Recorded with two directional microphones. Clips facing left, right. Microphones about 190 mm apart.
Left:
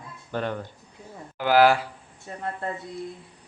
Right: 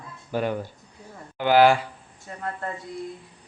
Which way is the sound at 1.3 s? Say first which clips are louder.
Right 1 dB; centre (ahead or behind).